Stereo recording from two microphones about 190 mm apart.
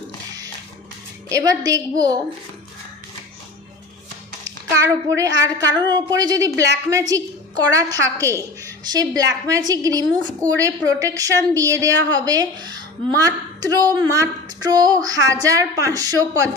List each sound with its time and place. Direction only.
1.3 s a woman's voice: 20° right (ahead or behind)
4.4 s a woman's voice: 15° right (ahead or behind)